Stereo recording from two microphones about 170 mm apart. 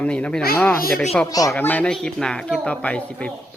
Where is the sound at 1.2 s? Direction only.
20° left (ahead or behind).